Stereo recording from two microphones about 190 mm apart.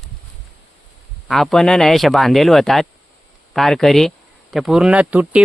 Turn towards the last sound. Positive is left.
turn(degrees=-5)  # may be behind; listen again after turning